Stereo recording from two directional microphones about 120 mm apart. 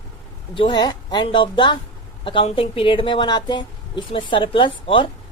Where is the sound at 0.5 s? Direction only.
40° left (ahead or behind).